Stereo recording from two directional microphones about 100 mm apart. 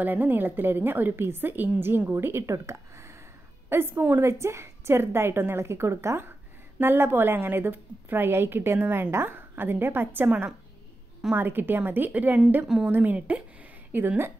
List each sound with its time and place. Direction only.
0.0 s a woman's voice: 20° right (ahead or behind)
12.6 s a woman's voice: 5° right (ahead or behind)
12.9 s a woman's voice: 15° right (ahead or behind)